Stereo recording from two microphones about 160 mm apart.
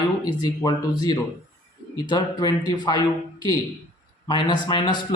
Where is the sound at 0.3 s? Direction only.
25° left (ahead or behind).